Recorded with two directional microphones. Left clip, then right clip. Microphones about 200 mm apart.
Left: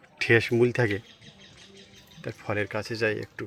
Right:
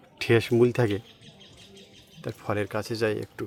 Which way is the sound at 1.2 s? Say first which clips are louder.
Even; 60° right (ahead or behind).